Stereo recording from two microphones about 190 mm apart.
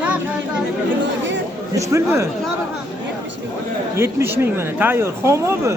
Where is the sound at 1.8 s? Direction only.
15° right (ahead or behind).